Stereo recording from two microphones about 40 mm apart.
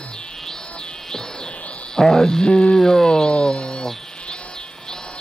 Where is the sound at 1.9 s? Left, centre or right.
Centre.